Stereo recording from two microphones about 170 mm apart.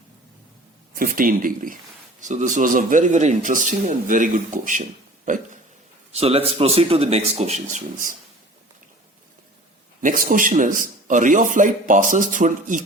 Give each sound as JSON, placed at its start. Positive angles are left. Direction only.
{"t": 0.9, "sound": "a man's voice", "side_deg": -55}
{"t": 6.1, "sound": "speech", "side_deg": -35}
{"t": 10.0, "sound": "a man's voice", "side_deg": -50}